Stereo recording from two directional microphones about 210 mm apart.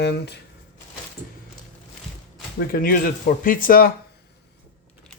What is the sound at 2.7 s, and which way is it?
Speech, 45° left (ahead or behind).